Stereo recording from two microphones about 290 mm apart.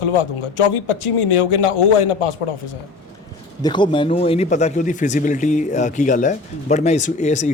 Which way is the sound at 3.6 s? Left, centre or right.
Centre.